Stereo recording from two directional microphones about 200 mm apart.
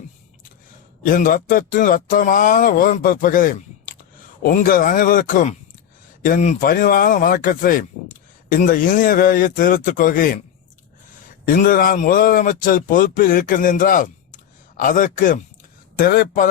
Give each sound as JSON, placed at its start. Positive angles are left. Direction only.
{"t": 1.0, "sound": "speech", "side_deg": 45}
{"t": 11.4, "sound": "speech", "side_deg": 45}